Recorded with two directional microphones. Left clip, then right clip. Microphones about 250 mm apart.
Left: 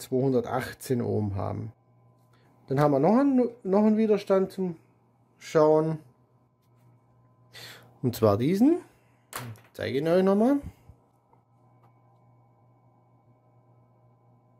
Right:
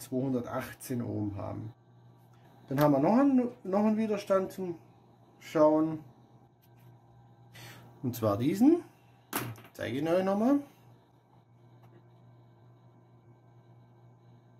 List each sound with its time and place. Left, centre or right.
0.0 s speech: left
2.7 s speech: left
5.4 s speech: left
7.5 s speech: left